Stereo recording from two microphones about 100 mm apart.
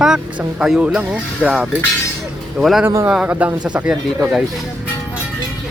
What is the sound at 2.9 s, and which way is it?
A man's voice, 25° right (ahead or behind).